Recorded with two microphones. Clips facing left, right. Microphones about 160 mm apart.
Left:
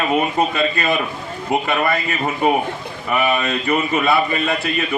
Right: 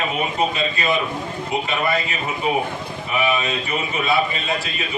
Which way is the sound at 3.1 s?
60° left (ahead or behind).